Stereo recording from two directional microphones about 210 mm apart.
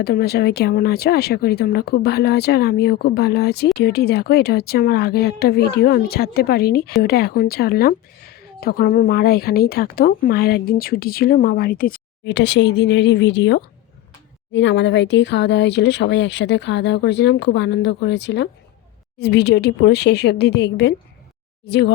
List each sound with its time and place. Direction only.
0.0 s speech: 50° left (ahead or behind)
12.2 s speech: 55° left (ahead or behind)